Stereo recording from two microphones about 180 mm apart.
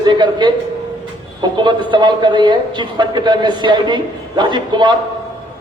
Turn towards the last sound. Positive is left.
turn(degrees=-25)  # may be behind; listen again after turning